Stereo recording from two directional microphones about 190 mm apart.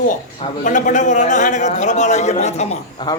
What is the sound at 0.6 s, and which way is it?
A man's voice, 40° left (ahead or behind).